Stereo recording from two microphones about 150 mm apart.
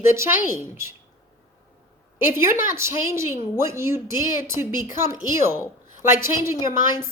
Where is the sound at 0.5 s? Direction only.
15° right (ahead or behind).